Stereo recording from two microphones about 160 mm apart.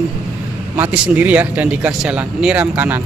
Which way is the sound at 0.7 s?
10° right (ahead or behind).